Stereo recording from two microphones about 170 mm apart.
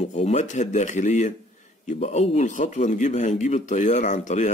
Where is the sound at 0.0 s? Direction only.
40° left (ahead or behind).